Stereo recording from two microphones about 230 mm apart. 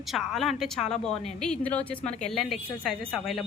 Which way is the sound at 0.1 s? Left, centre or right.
Centre.